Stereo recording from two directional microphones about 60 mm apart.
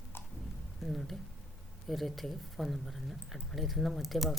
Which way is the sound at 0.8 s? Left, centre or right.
Centre.